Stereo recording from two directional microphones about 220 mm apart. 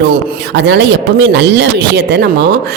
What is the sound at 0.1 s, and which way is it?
Speech, 50° right (ahead or behind).